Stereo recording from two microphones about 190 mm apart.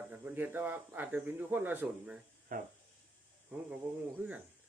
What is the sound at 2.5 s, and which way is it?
Speech, 45° right (ahead or behind).